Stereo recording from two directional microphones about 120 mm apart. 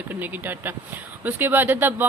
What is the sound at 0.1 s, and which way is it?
Speech, 15° right (ahead or behind).